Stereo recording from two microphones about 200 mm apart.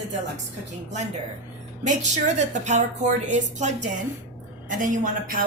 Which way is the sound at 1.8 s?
35° right (ahead or behind).